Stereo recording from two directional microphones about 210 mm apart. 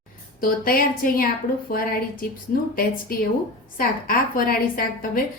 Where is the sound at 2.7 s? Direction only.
45° left (ahead or behind).